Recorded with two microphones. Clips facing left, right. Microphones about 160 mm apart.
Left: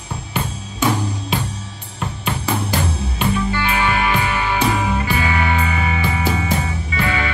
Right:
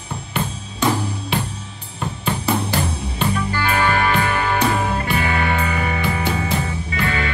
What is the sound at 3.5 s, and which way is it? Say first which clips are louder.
Music: even; 40° right (ahead or behind).